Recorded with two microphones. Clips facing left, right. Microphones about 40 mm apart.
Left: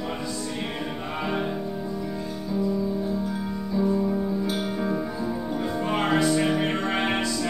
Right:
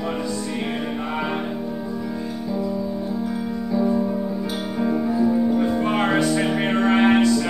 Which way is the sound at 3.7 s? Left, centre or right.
Right.